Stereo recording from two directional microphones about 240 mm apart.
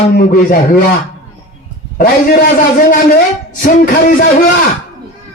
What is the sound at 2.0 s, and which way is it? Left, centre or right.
A man's voice, left.